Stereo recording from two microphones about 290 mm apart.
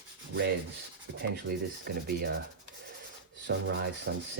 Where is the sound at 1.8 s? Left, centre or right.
Right.